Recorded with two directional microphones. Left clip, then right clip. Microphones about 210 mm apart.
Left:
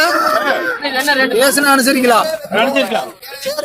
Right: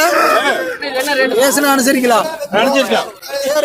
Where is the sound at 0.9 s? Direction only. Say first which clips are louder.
Even; 50° left (ahead or behind).